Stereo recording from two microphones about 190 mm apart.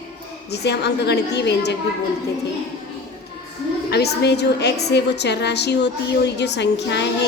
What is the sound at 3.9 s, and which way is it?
A woman's voice, 60° left (ahead or behind).